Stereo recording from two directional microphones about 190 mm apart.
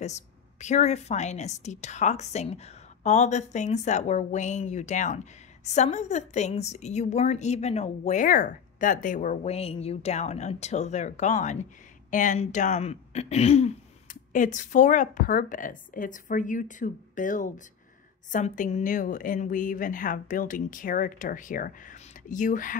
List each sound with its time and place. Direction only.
0.0 s a woman's voice: 35° left (ahead or behind)